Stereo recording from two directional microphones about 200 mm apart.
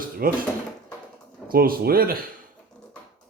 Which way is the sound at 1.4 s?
45° right (ahead or behind).